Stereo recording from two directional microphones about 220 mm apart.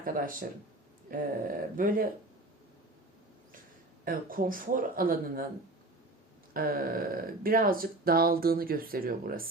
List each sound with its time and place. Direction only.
0.0 s speech: 40° right (ahead or behind)
4.0 s speech: 40° right (ahead or behind)
6.5 s speech: 40° right (ahead or behind)